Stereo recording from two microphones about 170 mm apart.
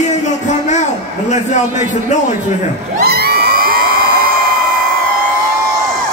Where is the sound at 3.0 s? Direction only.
65° right (ahead or behind).